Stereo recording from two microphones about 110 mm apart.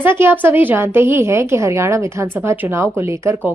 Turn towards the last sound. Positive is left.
turn(degrees=-25)  # may be behind; listen again after turning